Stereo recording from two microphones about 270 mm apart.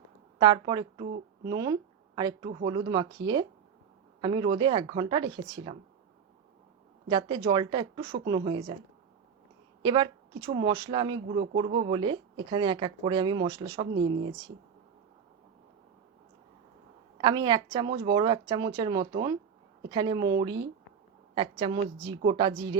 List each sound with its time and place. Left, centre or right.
0.3 s speech: centre
7.1 s speech: centre
9.8 s speech: centre
14.1 s speech: right
17.2 s a woman's voice: centre